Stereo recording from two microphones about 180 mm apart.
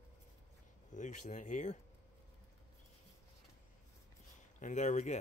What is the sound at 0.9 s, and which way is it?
Speech, 45° left (ahead or behind).